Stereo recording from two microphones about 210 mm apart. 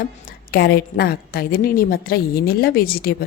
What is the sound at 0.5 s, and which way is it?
A woman's voice, 50° left (ahead or behind).